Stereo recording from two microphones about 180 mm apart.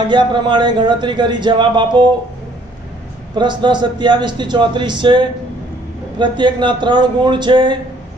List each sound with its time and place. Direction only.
0.1 s speech: 25° right (ahead or behind)
3.3 s speech: 25° right (ahead or behind)